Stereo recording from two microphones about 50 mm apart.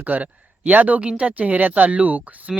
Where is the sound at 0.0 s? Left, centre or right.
Right.